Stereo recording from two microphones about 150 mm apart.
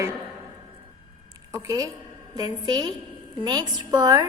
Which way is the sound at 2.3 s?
25° right (ahead or behind).